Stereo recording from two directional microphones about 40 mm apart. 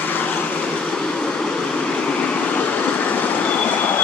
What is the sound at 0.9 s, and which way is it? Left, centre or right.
Vehicle, left.